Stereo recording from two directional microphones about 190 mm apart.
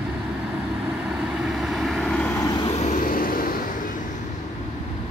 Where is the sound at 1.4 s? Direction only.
Centre (ahead or behind).